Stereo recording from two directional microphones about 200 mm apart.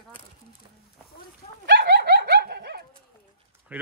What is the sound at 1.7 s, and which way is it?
Dog, 60° right (ahead or behind).